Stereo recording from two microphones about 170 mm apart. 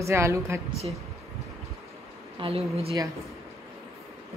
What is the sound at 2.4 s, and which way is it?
Speech, 35° right (ahead or behind).